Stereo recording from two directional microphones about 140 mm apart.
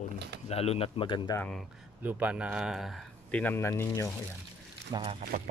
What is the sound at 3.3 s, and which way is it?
Speech, 10° left (ahead or behind).